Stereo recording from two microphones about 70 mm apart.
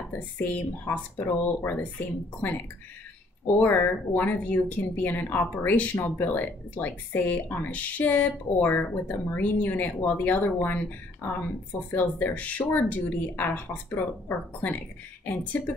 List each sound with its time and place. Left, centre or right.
0.4 s speech: left
3.5 s speech: left